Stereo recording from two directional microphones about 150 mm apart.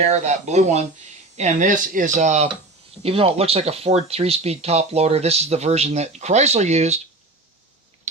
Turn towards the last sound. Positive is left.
turn(degrees=-45)  # may be behind; listen again after turning